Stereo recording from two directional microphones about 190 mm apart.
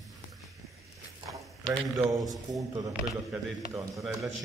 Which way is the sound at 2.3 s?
20° right (ahead or behind).